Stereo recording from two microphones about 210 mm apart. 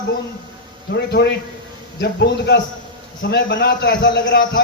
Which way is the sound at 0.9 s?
50° left (ahead or behind).